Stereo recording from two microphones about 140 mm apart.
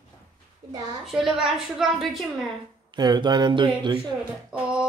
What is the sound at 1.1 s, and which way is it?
A woman's voice, centre (ahead or behind).